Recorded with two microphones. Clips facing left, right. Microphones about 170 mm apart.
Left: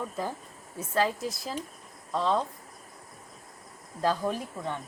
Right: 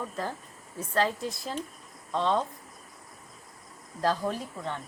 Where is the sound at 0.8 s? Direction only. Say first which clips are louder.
Even; 5° left (ahead or behind).